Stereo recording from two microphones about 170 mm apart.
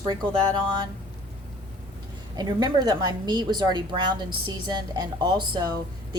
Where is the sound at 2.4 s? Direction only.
25° right (ahead or behind).